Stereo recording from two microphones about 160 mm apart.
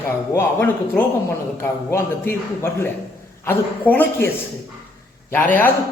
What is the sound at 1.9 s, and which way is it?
A man's voice, 15° left (ahead or behind).